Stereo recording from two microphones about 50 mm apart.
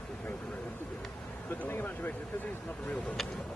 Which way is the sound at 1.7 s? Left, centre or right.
Left.